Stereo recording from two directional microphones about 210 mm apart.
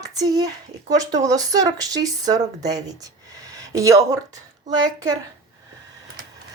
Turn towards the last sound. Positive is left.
turn(degrees=-20)  # may be behind; listen again after turning